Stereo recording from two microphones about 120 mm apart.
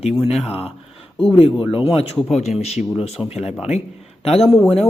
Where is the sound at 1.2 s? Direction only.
50° left (ahead or behind).